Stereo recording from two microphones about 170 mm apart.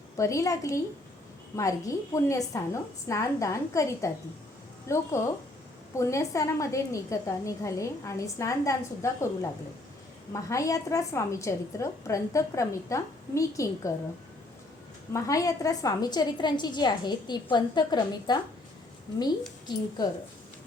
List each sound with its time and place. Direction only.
0.2 s a woman's voice: 20° left (ahead or behind)
2.1 s a woman's voice: 20° left (ahead or behind)
15.1 s a woman's voice: 20° left (ahead or behind)